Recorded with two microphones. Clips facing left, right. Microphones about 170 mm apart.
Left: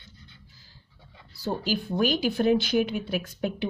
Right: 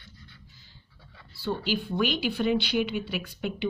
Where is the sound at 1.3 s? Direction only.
40° left (ahead or behind).